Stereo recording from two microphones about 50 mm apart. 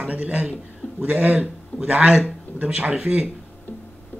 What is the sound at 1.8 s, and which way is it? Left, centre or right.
A man's voice, right.